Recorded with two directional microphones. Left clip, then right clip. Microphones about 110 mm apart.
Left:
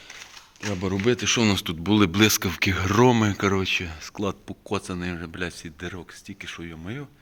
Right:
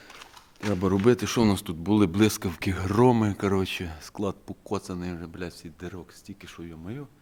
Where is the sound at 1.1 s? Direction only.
75° right (ahead or behind).